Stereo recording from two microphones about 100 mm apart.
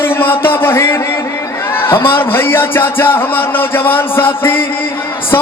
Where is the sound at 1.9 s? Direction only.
20° left (ahead or behind).